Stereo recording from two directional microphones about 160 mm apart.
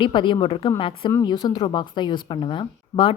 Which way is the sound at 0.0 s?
30° left (ahead or behind).